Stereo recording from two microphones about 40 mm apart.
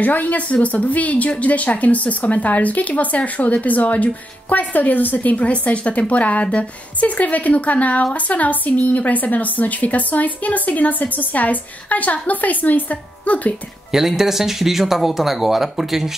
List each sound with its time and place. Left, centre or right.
0.0 s speech: left
13.9 s speech: centre